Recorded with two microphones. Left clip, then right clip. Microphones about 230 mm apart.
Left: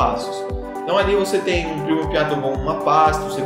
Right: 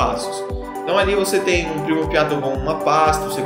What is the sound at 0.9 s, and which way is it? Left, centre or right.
Speech, centre.